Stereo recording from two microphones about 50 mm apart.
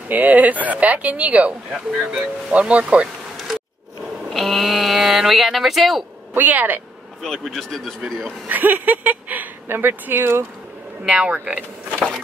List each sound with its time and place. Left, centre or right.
0.1 s speech: right
4.3 s speech: centre
6.3 s speech: right
7.2 s speech: centre
8.5 s speech: right
11.1 s speech: right